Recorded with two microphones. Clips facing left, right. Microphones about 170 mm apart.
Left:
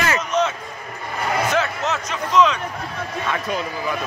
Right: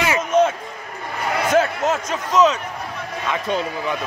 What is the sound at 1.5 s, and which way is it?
Speech, 50° right (ahead or behind).